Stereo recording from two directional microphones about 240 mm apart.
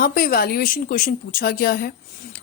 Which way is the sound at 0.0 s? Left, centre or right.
Left.